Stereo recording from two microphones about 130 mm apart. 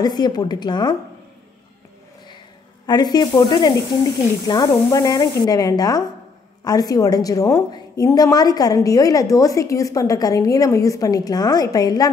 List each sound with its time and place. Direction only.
0.0 s speech: 30° left (ahead or behind)
2.9 s a woman's voice: 30° left (ahead or behind)